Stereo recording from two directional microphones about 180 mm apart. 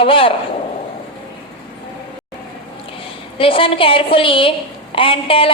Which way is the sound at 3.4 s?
30° left (ahead or behind).